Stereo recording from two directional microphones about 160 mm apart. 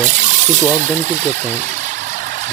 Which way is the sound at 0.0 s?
50° right (ahead or behind).